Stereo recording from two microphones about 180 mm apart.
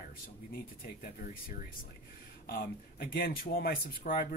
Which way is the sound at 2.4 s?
55° left (ahead or behind).